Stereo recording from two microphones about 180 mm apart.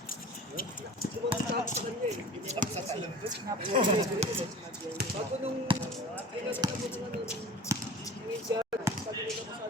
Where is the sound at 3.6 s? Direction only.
30° right (ahead or behind).